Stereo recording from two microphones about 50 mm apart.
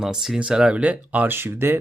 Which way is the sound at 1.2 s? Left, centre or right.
Right.